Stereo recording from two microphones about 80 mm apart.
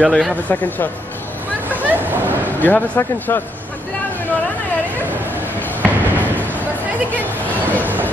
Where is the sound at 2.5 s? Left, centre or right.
Left.